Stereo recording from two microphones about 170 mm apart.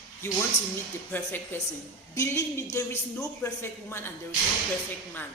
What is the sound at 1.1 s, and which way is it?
Speech, 10° left (ahead or behind).